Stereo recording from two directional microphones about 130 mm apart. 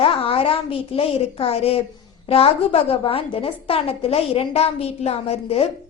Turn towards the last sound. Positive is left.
turn(degrees=50)  # may be behind; listen again after turning